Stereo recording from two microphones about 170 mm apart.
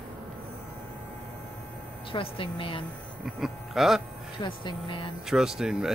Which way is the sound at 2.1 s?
30° left (ahead or behind).